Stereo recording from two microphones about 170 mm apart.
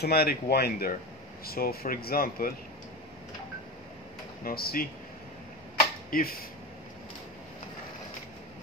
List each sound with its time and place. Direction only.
0.0 s speech: 65° left (ahead or behind)
4.5 s speech: 60° left (ahead or behind)
6.0 s speech: 60° left (ahead or behind)